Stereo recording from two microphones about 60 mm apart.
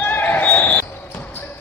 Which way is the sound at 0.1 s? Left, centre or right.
Left.